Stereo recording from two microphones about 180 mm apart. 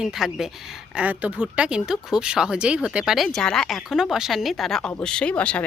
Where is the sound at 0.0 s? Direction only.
Centre (ahead or behind).